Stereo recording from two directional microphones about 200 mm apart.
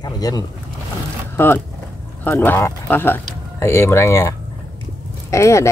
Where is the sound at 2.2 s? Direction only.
10° left (ahead or behind).